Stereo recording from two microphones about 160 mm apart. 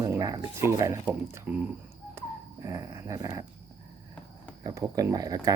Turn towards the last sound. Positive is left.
turn(degrees=-20)  # may be behind; listen again after turning